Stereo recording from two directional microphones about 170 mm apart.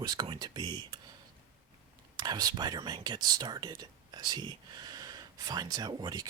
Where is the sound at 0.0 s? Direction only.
25° right (ahead or behind).